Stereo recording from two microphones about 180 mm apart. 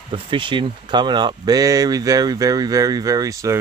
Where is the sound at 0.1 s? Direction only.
30° right (ahead or behind).